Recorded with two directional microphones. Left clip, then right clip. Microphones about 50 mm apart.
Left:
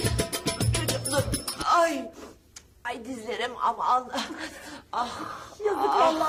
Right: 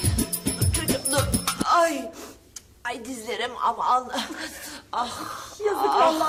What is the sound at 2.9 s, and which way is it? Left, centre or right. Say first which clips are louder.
A woman's voice: right 2 dB; left.